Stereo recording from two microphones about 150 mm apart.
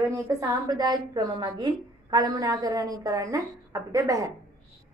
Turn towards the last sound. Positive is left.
turn(degrees=-20)  # may be behind; listen again after turning